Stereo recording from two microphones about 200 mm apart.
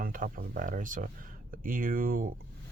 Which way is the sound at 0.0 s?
45° right (ahead or behind).